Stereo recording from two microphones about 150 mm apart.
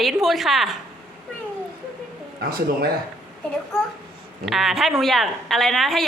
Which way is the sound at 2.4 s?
80° right.